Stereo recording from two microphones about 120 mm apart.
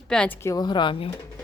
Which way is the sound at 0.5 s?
35° left (ahead or behind).